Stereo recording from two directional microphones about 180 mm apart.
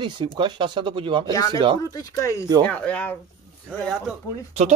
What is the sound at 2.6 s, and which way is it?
Speech, 5° left (ahead or behind).